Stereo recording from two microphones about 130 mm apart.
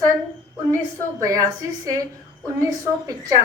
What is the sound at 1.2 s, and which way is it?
Speech, 25° right (ahead or behind).